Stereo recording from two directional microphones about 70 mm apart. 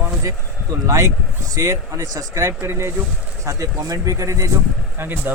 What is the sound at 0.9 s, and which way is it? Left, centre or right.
Speech, right.